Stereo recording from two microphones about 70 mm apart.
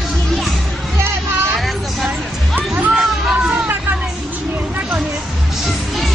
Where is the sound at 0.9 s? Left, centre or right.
Right.